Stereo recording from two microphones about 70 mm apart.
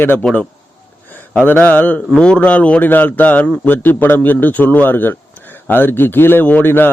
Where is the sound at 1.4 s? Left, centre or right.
Left.